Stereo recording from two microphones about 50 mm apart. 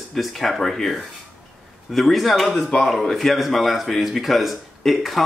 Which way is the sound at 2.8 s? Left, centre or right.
Centre.